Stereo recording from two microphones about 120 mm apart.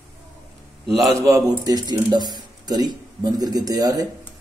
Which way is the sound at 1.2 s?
30° right (ahead or behind).